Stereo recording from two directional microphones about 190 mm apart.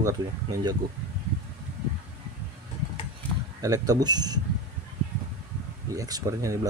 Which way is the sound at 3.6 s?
20° right (ahead or behind).